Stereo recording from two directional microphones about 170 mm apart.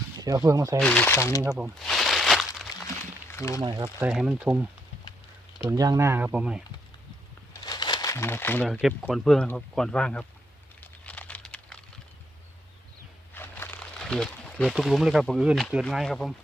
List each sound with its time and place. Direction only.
0.2 s speech: 20° right (ahead or behind)
0.8 s speech: 5° left (ahead or behind)
1.5 s a sound: 5° right (ahead or behind)
3.3 s speech: 15° left (ahead or behind)
3.6 s speech: 25° right (ahead or behind)
4.0 s speech: 5° right (ahead or behind)
5.6 s speech: 20° right (ahead or behind)
7.5 s crumpling: 25° left (ahead or behind)
8.6 s speech: centre (ahead or behind)
11.0 s a sound: 10° left (ahead or behind)
13.3 s speech: 10° left (ahead or behind)